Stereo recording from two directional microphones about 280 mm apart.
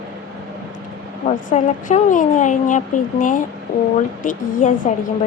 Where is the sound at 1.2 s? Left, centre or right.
Left.